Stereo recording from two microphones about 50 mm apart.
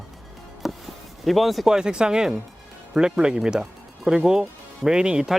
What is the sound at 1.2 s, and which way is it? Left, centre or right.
Speech, centre.